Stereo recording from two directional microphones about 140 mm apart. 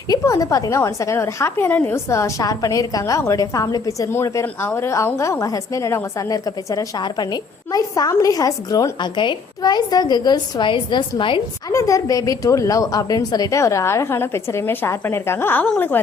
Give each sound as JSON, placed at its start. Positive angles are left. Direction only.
{"t": 0.1, "sound": "a woman's voice", "side_deg": 25}
{"t": 11.7, "sound": "a woman's voice", "side_deg": 25}